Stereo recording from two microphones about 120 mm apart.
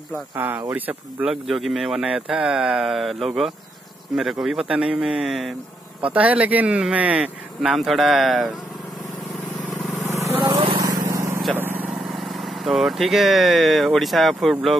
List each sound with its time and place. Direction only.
0.1 s speech: 15° right (ahead or behind)
1.3 s speech: centre (ahead or behind)
10.0 s vehicle: 20° right (ahead or behind)
10.5 s vehicle: 50° right (ahead or behind)
10.8 s vehicle: 30° right (ahead or behind)
12.1 s speech: centre (ahead or behind)